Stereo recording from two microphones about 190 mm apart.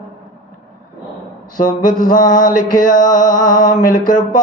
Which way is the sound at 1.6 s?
45° left (ahead or behind).